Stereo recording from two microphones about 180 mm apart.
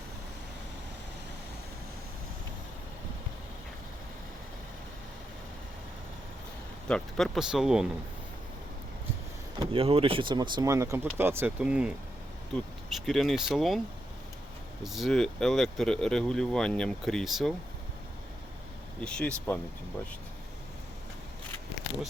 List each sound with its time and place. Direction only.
6.8 s speech: 5° left (ahead or behind)
9.6 s speech: 30° right (ahead or behind); by 13.8 s centre (ahead or behind)
14.8 s speech: centre (ahead or behind)
18.9 s speech: 5° left (ahead or behind)